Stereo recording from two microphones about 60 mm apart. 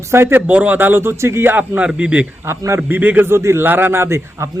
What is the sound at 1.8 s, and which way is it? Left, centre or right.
Speech, centre.